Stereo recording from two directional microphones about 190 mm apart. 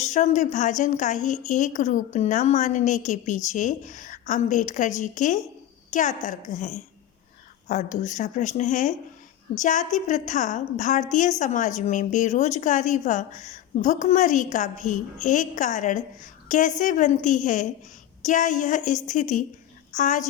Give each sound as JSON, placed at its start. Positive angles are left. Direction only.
{"t": 0.0, "sound": "a woman's voice", "side_deg": 40}